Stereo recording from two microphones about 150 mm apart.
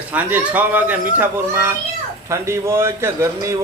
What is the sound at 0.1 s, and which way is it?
A man's voice, 10° right (ahead or behind).